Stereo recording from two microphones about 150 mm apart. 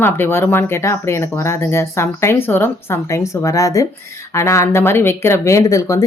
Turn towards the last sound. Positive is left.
turn(degrees=20)  # may be behind; listen again after turning